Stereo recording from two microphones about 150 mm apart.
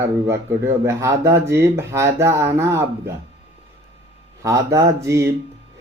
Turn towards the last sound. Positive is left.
turn(degrees=-20)  # may be behind; listen again after turning